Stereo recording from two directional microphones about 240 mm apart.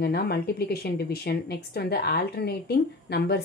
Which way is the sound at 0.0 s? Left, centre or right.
Left.